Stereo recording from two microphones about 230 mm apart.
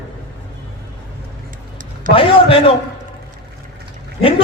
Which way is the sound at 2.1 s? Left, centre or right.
Left.